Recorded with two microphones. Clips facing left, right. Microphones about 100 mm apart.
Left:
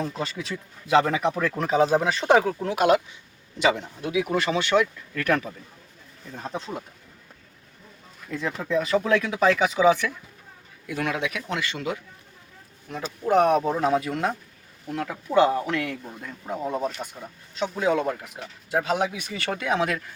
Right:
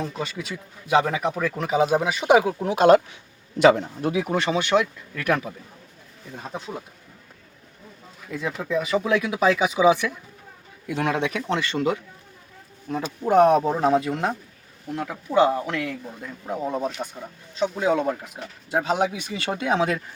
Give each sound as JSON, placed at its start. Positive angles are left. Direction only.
{"t": 0.0, "sound": "speech", "side_deg": 0}
{"t": 2.7, "sound": "speech", "side_deg": -35}
{"t": 3.6, "sound": "a man's voice", "side_deg": -45}
{"t": 4.3, "sound": "speech", "side_deg": -20}
{"t": 6.3, "sound": "speech", "side_deg": -5}
{"t": 8.2, "sound": "speech", "side_deg": -10}
{"t": 13.2, "sound": "speech", "side_deg": -35}
{"t": 14.9, "sound": "speech", "side_deg": -10}
{"t": 17.7, "sound": "speech", "side_deg": -15}